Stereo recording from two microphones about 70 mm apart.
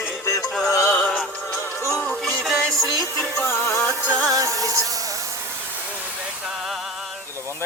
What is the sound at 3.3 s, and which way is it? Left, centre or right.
Music, left.